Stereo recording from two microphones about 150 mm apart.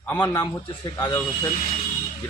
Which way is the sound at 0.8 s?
30° left (ahead or behind).